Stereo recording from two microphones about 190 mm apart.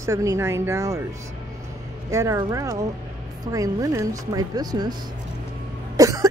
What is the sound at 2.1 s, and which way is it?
Speech, 15° right (ahead or behind).